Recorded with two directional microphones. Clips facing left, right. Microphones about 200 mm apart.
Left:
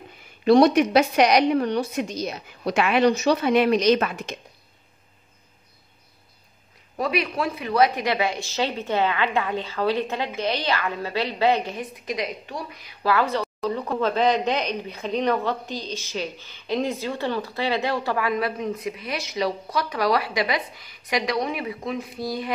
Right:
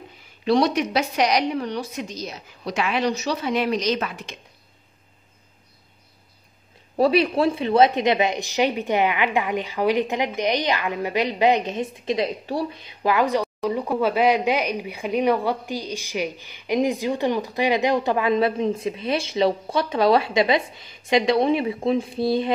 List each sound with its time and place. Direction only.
0.5 s a woman's voice: 55° left (ahead or behind)
7.0 s speech: 30° right (ahead or behind)